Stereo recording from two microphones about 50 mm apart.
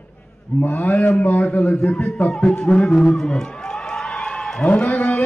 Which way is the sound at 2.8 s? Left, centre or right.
Centre.